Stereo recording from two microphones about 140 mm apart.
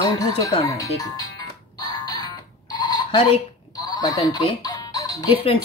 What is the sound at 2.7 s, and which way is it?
Alarm clock, 30° left (ahead or behind).